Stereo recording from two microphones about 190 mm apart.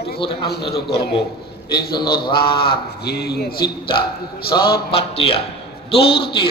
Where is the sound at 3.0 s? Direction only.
55° left (ahead or behind).